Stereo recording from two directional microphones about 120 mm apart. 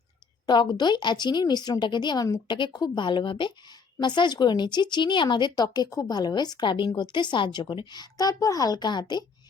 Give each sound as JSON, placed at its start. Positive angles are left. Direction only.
{"t": 0.4, "sound": "speech", "side_deg": 40}